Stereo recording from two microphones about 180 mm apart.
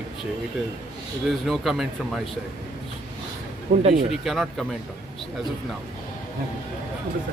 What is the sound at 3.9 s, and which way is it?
Speech, centre (ahead or behind).